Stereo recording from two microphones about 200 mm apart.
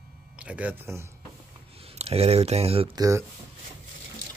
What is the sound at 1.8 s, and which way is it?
Speech, 30° right (ahead or behind).